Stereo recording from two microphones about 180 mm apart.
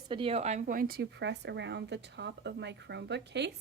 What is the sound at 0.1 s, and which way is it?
Speech, 30° right (ahead or behind).